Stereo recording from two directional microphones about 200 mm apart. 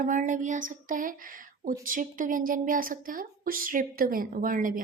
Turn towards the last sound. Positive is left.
turn(degrees=-45)  # may be behind; listen again after turning